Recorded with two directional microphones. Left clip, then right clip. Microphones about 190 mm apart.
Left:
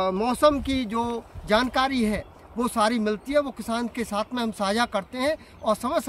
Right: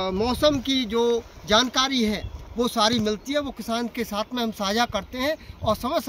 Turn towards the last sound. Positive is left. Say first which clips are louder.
# even
turn(degrees=0)  # may be behind; listen again after turning